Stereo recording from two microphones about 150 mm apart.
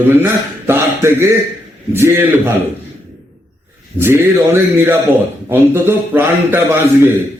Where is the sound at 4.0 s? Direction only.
15° right (ahead or behind).